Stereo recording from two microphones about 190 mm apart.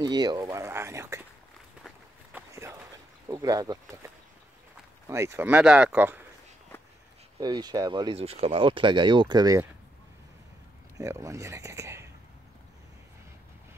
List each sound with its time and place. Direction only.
0.0 s speech: 20° right (ahead or behind)
1.8 s walk: centre (ahead or behind)
2.5 s a sound: 15° right (ahead or behind)
3.3 s speech: 20° right (ahead or behind)
6.7 s a sound: 10° left (ahead or behind)
7.3 s speech: 20° right (ahead or behind)
11.0 s speech: 15° right (ahead or behind)